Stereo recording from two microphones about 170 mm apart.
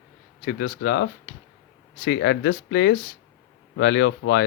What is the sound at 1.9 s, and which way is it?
Speech, 75° left (ahead or behind).